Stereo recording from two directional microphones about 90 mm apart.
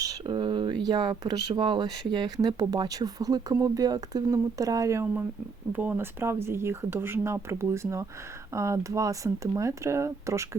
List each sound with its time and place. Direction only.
0.0 s a sound: 45° right (ahead or behind)
0.3 s speech: 60° right (ahead or behind); by 5.2 s 35° right (ahead or behind)
5.7 s speech: 20° right (ahead or behind)